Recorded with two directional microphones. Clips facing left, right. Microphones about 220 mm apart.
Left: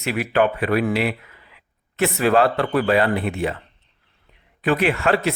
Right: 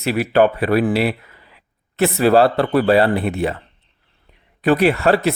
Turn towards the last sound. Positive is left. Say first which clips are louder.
# right 4 dB
turn(degrees=-35)  # may be behind; listen again after turning